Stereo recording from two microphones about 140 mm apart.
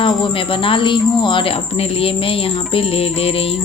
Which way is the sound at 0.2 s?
40° left (ahead or behind).